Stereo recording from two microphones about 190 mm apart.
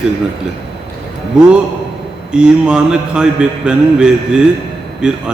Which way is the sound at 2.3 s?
5° right (ahead or behind).